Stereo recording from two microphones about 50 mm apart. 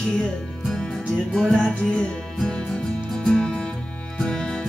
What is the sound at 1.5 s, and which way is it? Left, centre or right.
Music, centre.